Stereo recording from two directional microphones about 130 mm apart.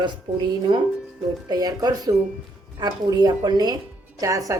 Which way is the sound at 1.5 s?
30° right (ahead or behind).